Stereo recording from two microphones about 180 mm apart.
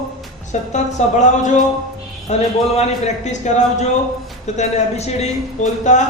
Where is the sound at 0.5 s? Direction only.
40° left (ahead or behind).